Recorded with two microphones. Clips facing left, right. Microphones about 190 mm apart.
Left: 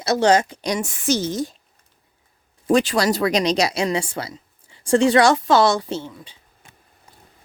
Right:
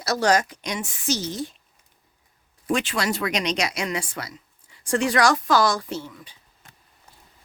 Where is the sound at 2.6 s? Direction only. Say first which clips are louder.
Left 7 dB; 35° left (ahead or behind).